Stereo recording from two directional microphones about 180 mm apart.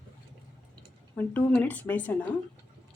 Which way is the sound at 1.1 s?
10° left (ahead or behind).